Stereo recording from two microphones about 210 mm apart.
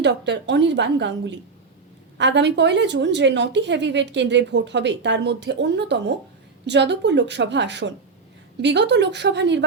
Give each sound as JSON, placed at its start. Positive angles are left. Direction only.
{"t": 0.0, "sound": "a woman's voice", "side_deg": -55}